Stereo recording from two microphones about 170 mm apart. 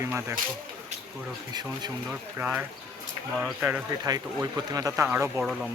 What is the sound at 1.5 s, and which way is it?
Speech, 25° right (ahead or behind).